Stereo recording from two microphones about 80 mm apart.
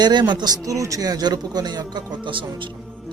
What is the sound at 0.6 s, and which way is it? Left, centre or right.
Speech, right.